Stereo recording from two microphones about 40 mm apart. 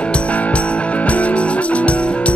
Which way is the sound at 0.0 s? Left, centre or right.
Left.